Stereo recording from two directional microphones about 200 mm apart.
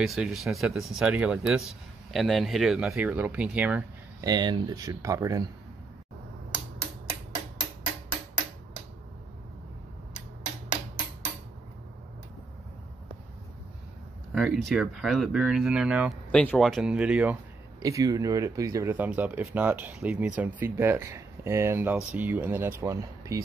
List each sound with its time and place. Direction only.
0.0 s speech: centre (ahead or behind)
4.3 s speech: 20° right (ahead or behind)
14.3 s a sound: centre (ahead or behind)
14.7 s speech: centre (ahead or behind)
17.7 s speech: 15° right (ahead or behind)